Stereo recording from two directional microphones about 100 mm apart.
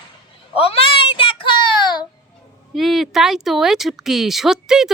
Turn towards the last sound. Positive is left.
turn(degrees=-5)  # may be behind; listen again after turning